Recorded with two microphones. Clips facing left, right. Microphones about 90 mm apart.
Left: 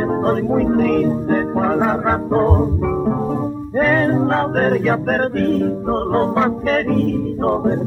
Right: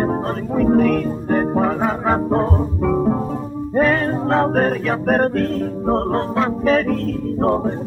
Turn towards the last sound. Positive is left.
turn(degrees=0)  # may be behind; listen again after turning